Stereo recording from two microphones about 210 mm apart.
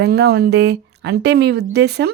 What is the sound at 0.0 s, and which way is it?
Speech, 50° right (ahead or behind).